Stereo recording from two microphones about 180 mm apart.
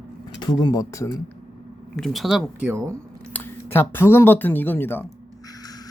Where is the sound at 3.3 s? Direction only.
10° left (ahead or behind).